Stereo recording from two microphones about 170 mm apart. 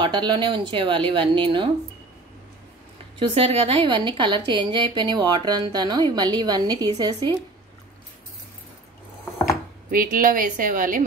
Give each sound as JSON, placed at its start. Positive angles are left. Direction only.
{"t": 0.0, "sound": "a woman's voice", "side_deg": -25}
{"t": 3.2, "sound": "a woman's voice", "side_deg": -35}
{"t": 9.8, "sound": "a woman's voice", "side_deg": -55}